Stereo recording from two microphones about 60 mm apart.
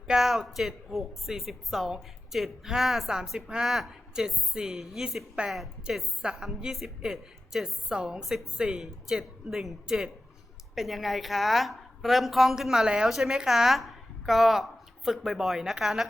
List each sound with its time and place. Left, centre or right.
0.1 s a woman's voice: centre
5.4 s a woman's voice: right
5.9 s a woman's voice: centre